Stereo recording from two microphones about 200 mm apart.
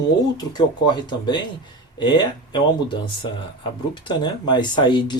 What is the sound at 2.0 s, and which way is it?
Speech, 25° left (ahead or behind).